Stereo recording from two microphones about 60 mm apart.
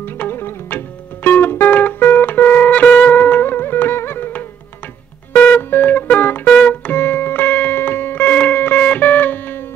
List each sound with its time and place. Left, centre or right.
0.0 s music: left